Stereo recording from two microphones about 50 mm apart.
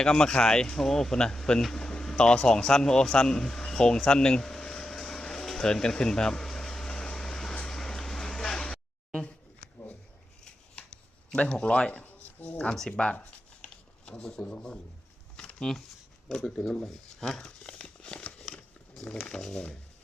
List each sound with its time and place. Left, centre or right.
0.0 s speech: centre
3.7 s air conditioning: centre
7.5 s vehicle: centre
11.3 s speech: left
12.9 s speech: centre
13.6 s a sound: centre
15.4 s shuffling cards: centre
16.4 s speech: centre
17.2 s crumpling: centre
17.7 s crumpling: centre
18.2 s crumpling: left
18.9 s speech: centre